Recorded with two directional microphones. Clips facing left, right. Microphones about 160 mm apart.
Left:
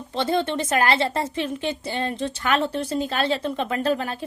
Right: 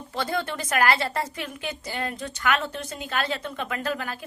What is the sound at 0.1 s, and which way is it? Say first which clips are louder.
Speech: left 6 dB; 25° left (ahead or behind).